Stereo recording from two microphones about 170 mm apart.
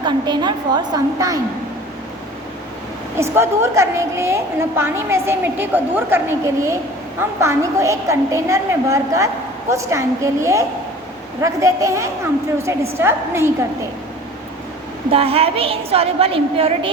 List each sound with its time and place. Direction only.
0.0 s a woman's voice: 25° right (ahead or behind)
3.2 s a woman's voice: 15° right (ahead or behind)
15.1 s a woman's voice: 35° right (ahead or behind)